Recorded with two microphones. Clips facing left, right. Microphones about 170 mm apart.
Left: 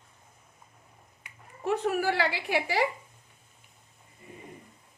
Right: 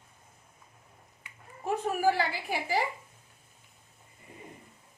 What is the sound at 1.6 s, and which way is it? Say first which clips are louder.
A woman's voice: even; 80° left.